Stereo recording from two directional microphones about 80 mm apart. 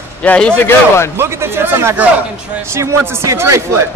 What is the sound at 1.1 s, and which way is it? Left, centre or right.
Speech, right.